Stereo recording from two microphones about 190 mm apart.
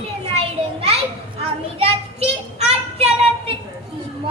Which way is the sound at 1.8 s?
30° right (ahead or behind).